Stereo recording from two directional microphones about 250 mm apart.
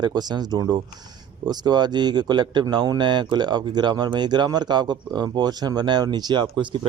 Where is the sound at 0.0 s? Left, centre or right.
Centre.